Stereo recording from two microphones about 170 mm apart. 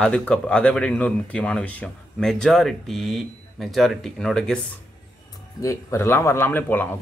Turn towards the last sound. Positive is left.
turn(degrees=10)  # may be behind; listen again after turning